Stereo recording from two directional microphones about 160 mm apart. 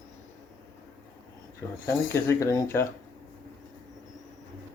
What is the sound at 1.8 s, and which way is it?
Speech, 15° left (ahead or behind).